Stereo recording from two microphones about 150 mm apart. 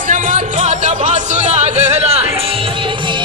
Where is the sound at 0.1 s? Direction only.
60° right (ahead or behind).